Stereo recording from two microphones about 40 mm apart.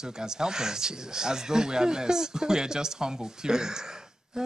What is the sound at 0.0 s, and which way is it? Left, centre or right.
A man's voice, centre.